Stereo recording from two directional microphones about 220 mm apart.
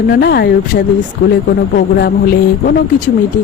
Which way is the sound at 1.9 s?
45° left (ahead or behind).